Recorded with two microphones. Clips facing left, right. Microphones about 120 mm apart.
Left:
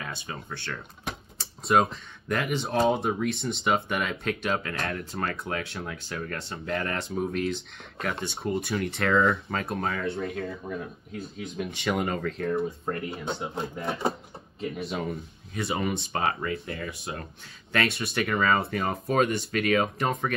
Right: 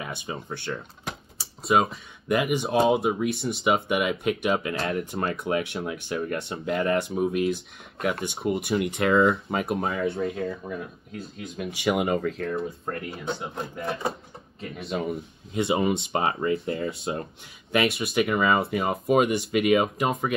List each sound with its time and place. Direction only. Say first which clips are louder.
0.0 s speech: right 3 dB; 20° right (ahead or behind)
1.0 s speech: even; centre (ahead or behind)
4.7 s speech: right 4 dB; 25° right (ahead or behind)
10.0 s speech: right 4 dB; centre (ahead or behind)
14.6 s speech: right 1 dB; centre (ahead or behind)
15.5 s speech: right 5 dB; 20° right (ahead or behind)
17.7 s speech: right 4 dB; 5° right (ahead or behind)